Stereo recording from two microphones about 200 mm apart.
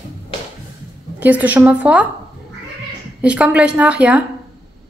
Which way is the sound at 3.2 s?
5° right (ahead or behind).